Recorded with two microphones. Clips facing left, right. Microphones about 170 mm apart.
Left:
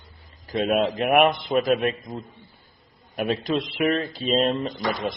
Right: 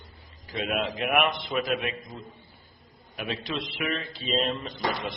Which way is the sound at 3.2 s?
45° left (ahead or behind).